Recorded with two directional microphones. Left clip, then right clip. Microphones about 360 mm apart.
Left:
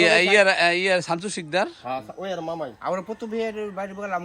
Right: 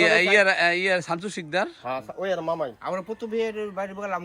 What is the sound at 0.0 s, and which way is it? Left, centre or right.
Speech, centre.